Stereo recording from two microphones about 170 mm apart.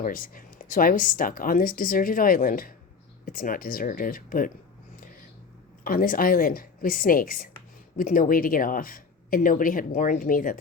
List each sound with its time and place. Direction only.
0.0 s speech: 55° left (ahead or behind)
5.8 s speech: 55° left (ahead or behind)